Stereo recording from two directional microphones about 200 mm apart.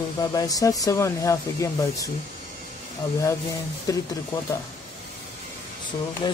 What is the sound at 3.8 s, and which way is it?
Speech, 15° left (ahead or behind).